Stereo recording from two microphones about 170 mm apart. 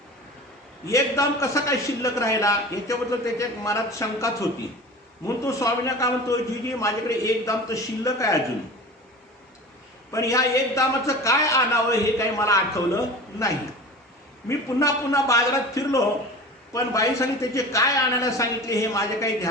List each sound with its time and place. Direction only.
0.9 s a man's voice: 15° left (ahead or behind)
10.1 s a man's voice: 20° left (ahead or behind)
14.4 s a man's voice: 20° left (ahead or behind)